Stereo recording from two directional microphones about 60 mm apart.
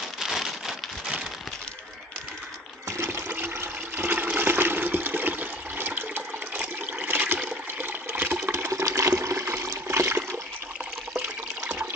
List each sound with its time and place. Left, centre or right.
0.2 s a sound: centre
3.3 s toilet flush: right
4.4 s water: right
7.3 s toilet flush: right
8.5 s water: right
8.8 s water: right
11.6 s toilet flush: right